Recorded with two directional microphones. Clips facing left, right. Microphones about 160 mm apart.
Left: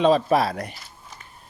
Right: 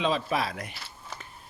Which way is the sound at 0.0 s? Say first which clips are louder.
Left 9 dB; 40° left (ahead or behind).